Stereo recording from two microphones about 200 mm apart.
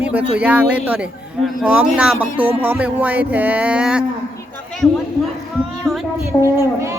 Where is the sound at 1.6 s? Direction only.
5° right (ahead or behind).